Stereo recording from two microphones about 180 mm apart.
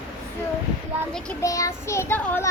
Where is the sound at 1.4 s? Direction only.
20° left (ahead or behind).